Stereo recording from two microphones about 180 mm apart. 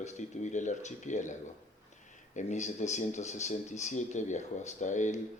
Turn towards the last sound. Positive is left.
turn(degrees=40)  # may be behind; listen again after turning